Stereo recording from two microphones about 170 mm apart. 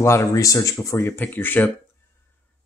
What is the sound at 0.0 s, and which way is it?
Speech, 15° left (ahead or behind).